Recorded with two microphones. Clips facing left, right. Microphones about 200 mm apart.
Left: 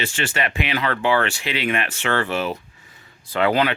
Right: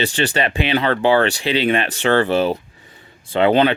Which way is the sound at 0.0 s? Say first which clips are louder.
Right 6 dB; 35° right (ahead or behind).